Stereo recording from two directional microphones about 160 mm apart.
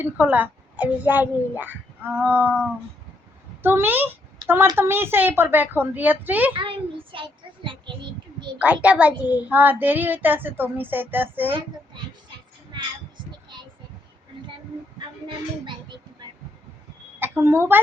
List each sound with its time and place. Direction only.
0.0 s a child's voice: 10° right (ahead or behind)
3.6 s a child's voice: 15° right (ahead or behind)
4.4 s a sound: 30° right (ahead or behind)
4.8 s a child's voice: 15° right (ahead or behind)
6.5 s a child's voice: 30° right (ahead or behind)
8.5 s a child's voice: 10° right (ahead or behind)
17.2 s a woman's voice: 15° right (ahead or behind)